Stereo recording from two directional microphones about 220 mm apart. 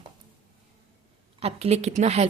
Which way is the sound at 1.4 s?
25° right (ahead or behind).